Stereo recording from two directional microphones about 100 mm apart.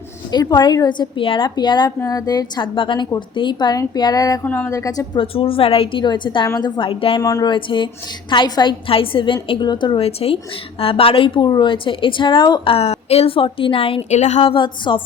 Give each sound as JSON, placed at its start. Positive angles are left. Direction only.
{"t": 0.3, "sound": "a woman's voice", "side_deg": 45}
{"t": 1.5, "sound": "a woman's voice", "side_deg": 45}
{"t": 2.7, "sound": "a woman's voice", "side_deg": 55}
{"t": 4.4, "sound": "speech", "side_deg": 15}
{"t": 4.7, "sound": "speech", "side_deg": 35}
{"t": 5.2, "sound": "a woman's voice", "side_deg": 65}
{"t": 7.2, "sound": "speech", "side_deg": 35}
{"t": 7.5, "sound": "a woman's voice", "side_deg": 55}
{"t": 8.9, "sound": "a woman's voice", "side_deg": 60}
{"t": 10.0, "sound": "a woman's voice", "side_deg": 80}
{"t": 10.8, "sound": "a woman's voice", "side_deg": 70}
{"t": 11.4, "sound": "a woman's voice", "side_deg": 50}
{"t": 12.7, "sound": "a woman's voice", "side_deg": 90}